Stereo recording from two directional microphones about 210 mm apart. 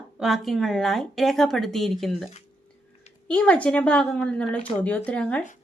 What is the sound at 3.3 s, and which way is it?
A woman's voice, 5° left (ahead or behind).